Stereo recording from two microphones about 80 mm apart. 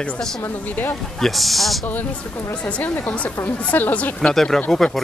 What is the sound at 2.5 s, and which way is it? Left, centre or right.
A man's voice, centre.